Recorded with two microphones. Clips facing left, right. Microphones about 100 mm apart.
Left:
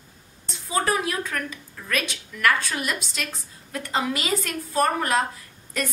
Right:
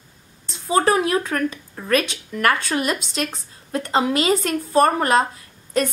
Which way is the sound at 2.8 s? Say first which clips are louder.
Right 6 dB; 25° right (ahead or behind).